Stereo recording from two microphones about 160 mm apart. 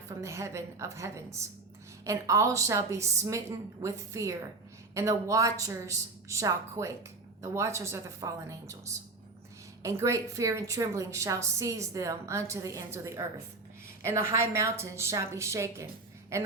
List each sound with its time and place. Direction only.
0.1 s a woman's voice: 20° right (ahead or behind)